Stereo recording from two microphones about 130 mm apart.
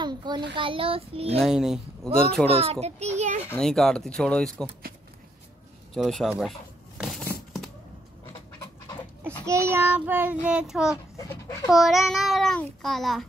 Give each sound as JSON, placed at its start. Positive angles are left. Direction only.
{"t": 0.0, "sound": "a child's voice", "side_deg": -35}
{"t": 1.4, "sound": "a child's voice", "side_deg": -5}
{"t": 2.4, "sound": "a child's voice", "side_deg": -50}
{"t": 3.5, "sound": "a child's voice", "side_deg": 5}
{"t": 5.9, "sound": "a child's voice", "side_deg": 0}
{"t": 7.0, "sound": "a sound", "side_deg": 0}
{"t": 9.5, "sound": "child singing", "side_deg": -20}
{"t": 11.1, "sound": "speech", "side_deg": 20}
{"t": 11.7, "sound": "a child's voice", "side_deg": 0}